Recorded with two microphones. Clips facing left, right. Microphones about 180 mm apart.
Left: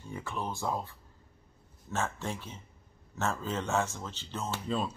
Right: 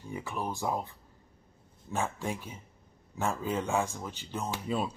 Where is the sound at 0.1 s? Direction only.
15° right (ahead or behind).